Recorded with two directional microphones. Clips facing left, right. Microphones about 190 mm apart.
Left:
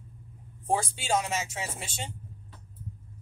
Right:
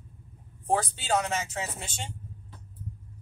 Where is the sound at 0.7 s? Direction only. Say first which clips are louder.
Right 1 dB; 10° left (ahead or behind).